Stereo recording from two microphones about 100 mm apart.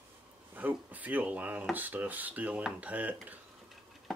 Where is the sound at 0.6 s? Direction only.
15° right (ahead or behind).